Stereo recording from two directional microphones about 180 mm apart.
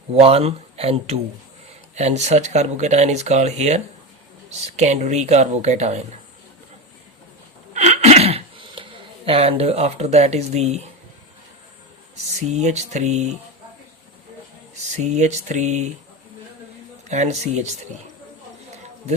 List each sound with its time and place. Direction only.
0.1 s speech: 35° right (ahead or behind)
7.7 s a sound: 40° right (ahead or behind)
12.5 s speech: 40° right (ahead or behind)
14.9 s speech: 40° right (ahead or behind)
17.1 s speech: 40° right (ahead or behind)